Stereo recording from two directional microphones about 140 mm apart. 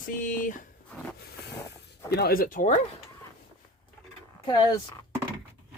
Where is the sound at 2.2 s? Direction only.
90° left.